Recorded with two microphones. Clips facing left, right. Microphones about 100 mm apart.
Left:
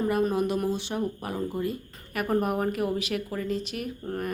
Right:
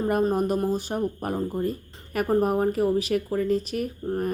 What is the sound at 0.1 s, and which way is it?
Speech, 40° right (ahead or behind).